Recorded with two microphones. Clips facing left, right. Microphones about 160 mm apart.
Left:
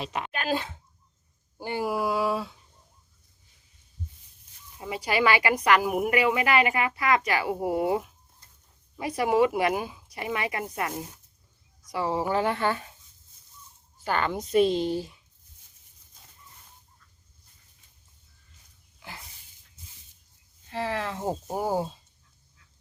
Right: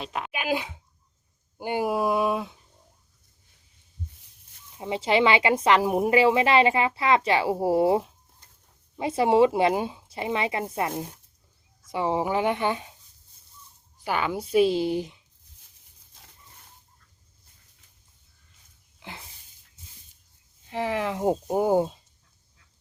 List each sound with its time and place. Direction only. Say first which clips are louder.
0.0 s speech: even; centre (ahead or behind)
0.3 s a woman's voice: right 2 dB; 10° right (ahead or behind)
4.8 s a woman's voice: right 4 dB; 25° right (ahead or behind)
14.0 s speech: even; 10° right (ahead or behind)
20.7 s speech: right 3 dB; 15° right (ahead or behind)